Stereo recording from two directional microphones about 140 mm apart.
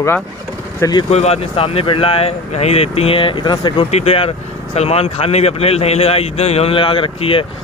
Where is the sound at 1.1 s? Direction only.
45° left (ahead or behind).